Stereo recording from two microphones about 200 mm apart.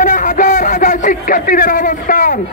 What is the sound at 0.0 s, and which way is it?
A man's voice, 40° left (ahead or behind).